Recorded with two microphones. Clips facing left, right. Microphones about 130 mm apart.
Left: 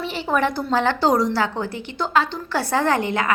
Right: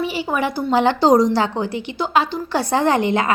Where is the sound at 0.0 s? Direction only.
5° right (ahead or behind).